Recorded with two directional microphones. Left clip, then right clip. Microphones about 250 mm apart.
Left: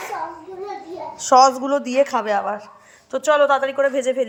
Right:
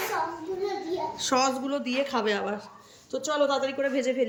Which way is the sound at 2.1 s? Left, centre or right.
Centre.